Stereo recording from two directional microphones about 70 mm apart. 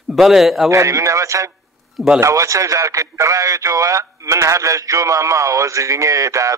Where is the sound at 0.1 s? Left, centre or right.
Centre.